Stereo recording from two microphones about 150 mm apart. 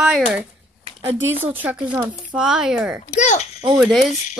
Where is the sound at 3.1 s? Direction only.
50° left (ahead or behind).